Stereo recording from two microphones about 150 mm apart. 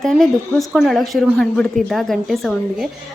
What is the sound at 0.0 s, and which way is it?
Speech, centre (ahead or behind).